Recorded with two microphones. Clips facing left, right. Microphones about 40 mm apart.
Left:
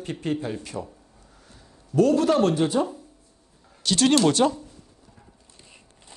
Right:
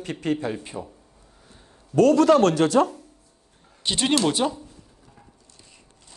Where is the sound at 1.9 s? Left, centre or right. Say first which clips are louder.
Right 3 dB; right.